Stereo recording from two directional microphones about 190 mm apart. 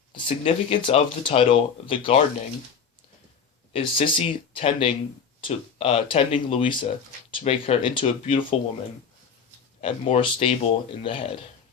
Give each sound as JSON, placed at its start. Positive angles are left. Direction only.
{"t": 0.1, "sound": "speech", "side_deg": 30}
{"t": 3.7, "sound": "speech", "side_deg": 30}
{"t": 9.8, "sound": "speech", "side_deg": 30}